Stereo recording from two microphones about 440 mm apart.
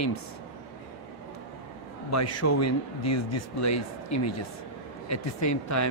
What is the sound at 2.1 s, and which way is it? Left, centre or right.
Speech, left.